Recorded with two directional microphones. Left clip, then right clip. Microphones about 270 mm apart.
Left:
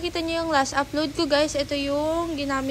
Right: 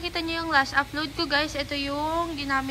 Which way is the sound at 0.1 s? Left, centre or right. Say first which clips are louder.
Even; centre.